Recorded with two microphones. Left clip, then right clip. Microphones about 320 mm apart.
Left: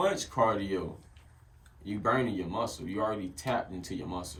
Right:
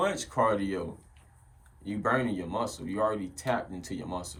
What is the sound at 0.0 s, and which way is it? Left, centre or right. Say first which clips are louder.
Speech: even; centre.